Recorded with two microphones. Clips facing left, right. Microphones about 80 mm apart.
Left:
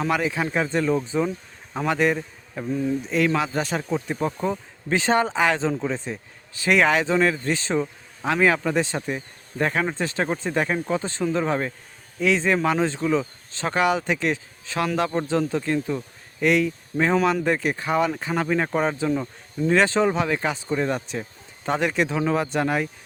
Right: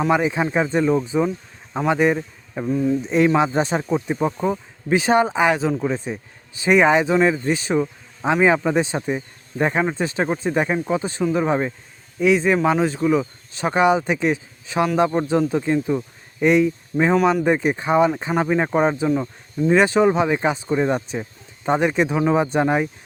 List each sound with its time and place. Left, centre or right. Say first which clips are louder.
0.0 s speech: right 4 dB; centre